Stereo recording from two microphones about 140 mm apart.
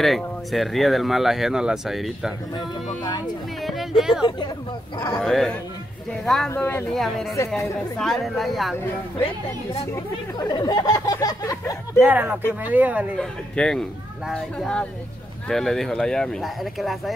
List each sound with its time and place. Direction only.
0.0 s speech: centre (ahead or behind)
2.5 s speech: 30° left (ahead or behind)
3.6 s speech: centre (ahead or behind)
4.9 s a man's voice: 30° left (ahead or behind)
5.2 s speech: 5° left (ahead or behind)
6.5 s speech: 15° left (ahead or behind)
6.9 s speech: centre (ahead or behind)
7.3 s speech: 20° left (ahead or behind)
8.0 s speech: centre (ahead or behind)
9.9 s speech: 30° left (ahead or behind)
12.0 s speech: 10° right (ahead or behind)
13.2 s speech: 5° left (ahead or behind)